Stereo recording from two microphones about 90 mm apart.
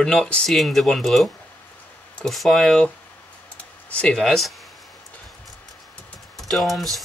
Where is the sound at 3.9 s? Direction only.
10° left (ahead or behind).